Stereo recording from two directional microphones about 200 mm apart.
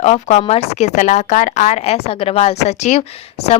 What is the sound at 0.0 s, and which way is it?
Speech, 35° left (ahead or behind).